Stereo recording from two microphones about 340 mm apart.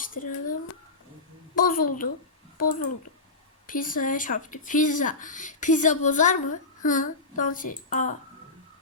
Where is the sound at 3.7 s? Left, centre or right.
Left.